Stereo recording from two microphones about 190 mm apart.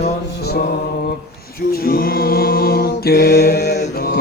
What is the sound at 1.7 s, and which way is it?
Mantra, 50° left (ahead or behind).